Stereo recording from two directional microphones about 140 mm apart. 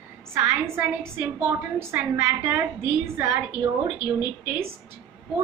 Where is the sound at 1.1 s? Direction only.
15° right (ahead or behind).